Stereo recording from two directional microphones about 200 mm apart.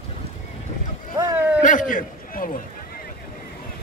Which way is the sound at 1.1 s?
10° right (ahead or behind).